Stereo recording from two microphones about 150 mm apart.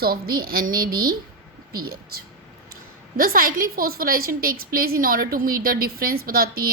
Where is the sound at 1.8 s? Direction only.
90° right.